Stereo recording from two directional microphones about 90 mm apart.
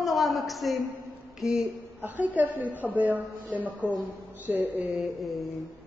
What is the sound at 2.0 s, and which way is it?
A woman's voice, 20° right (ahead or behind).